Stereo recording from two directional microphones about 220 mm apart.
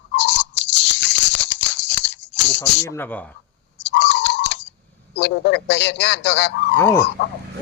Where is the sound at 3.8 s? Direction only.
50° left (ahead or behind).